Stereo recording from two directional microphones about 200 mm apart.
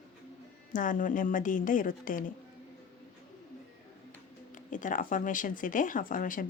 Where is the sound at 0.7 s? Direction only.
40° left (ahead or behind).